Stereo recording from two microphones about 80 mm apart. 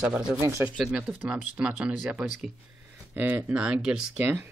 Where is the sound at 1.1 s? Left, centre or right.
Centre.